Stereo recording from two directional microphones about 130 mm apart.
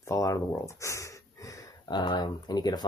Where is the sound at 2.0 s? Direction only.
35° left (ahead or behind).